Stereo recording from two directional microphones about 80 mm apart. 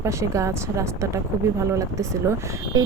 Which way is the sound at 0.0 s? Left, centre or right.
Right.